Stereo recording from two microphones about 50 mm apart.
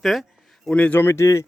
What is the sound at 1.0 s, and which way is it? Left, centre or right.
Speech, left.